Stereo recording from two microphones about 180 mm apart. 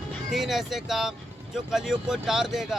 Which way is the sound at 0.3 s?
Centre (ahead or behind).